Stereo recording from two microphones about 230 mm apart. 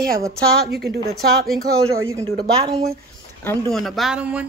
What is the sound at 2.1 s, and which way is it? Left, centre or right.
Speech, centre.